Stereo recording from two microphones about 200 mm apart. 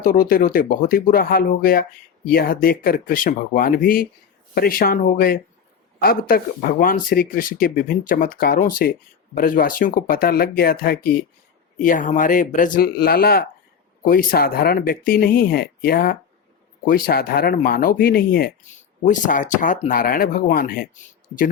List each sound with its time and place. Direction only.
0.0 s speech: 45° left (ahead or behind)